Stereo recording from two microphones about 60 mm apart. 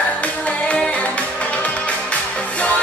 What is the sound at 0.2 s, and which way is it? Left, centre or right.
Music, left.